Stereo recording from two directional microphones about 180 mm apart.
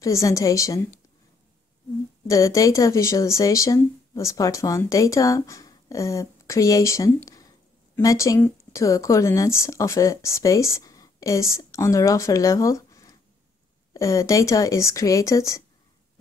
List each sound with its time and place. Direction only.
0.0 s speech: 15° left (ahead or behind)
2.2 s speech: 20° left (ahead or behind)